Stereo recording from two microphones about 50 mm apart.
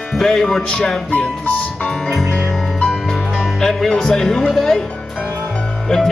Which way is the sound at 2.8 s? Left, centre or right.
Centre.